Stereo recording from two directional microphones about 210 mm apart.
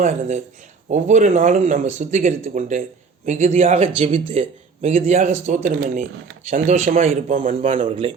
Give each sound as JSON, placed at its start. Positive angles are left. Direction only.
{"t": 0.0, "sound": "speech", "side_deg": -35}